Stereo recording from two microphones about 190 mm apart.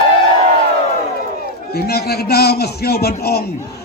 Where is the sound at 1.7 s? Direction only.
55° left (ahead or behind).